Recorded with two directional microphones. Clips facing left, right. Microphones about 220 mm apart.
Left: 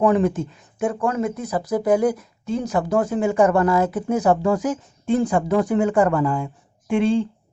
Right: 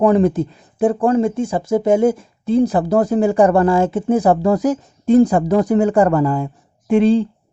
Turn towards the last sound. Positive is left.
turn(degrees=-35)  # may be behind; listen again after turning